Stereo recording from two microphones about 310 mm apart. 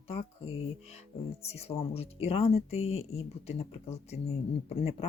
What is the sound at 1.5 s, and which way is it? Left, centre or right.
Speech, centre.